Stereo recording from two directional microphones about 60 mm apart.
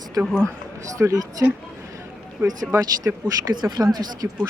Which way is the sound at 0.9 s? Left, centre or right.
Right.